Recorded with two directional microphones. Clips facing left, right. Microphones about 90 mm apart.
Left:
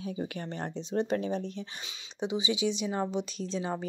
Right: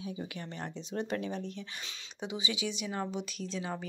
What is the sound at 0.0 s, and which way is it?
Speech, 45° left (ahead or behind).